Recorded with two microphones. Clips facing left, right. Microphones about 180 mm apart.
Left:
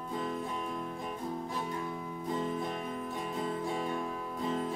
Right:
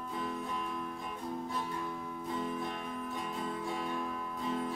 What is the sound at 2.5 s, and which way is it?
Music, 35° left (ahead or behind).